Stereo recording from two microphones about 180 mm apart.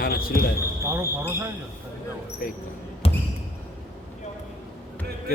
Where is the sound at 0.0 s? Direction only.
55° left (ahead or behind).